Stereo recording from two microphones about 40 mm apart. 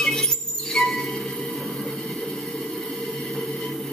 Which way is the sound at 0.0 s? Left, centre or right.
Centre.